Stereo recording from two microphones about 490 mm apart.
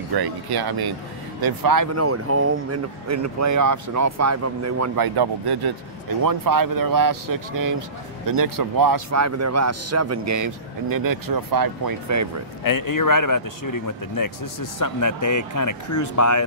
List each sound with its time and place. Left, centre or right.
0.1 s a man's voice: right
2.0 s a man's voice: right
5.0 s a man's voice: right
12.6 s speech: left